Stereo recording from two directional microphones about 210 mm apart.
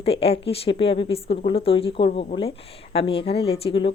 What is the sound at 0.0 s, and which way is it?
A woman's voice, 30° left (ahead or behind).